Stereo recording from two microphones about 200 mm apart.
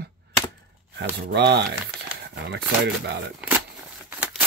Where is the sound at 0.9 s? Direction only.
55° right (ahead or behind).